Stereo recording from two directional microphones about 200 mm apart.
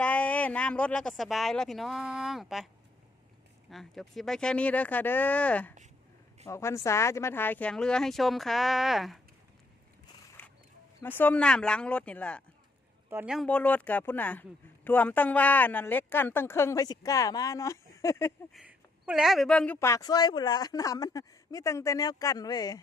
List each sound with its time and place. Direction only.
0.0 s speech: 5° left (ahead or behind)
3.7 s speech: centre (ahead or behind)
11.0 s speech: 10° left (ahead or behind)
13.1 s speech: 5° right (ahead or behind); by 18.3 s 15° left (ahead or behind)
18.5 s speech: 5° right (ahead or behind); by 22.8 s 20° left (ahead or behind)